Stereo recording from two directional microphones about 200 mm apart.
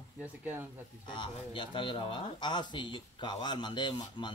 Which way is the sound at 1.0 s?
25° left (ahead or behind).